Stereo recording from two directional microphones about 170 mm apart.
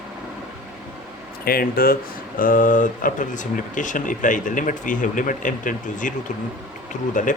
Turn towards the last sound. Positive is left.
turn(degrees=50)  # may be behind; listen again after turning